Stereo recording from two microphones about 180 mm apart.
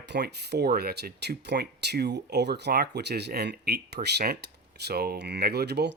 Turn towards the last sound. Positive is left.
turn(degrees=-65)  # may be behind; listen again after turning